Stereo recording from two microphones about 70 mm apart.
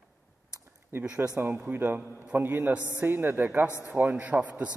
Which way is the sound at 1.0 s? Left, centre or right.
Centre.